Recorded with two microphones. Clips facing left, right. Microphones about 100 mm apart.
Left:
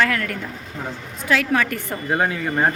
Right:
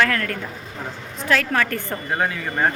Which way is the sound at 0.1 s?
10° left (ahead or behind).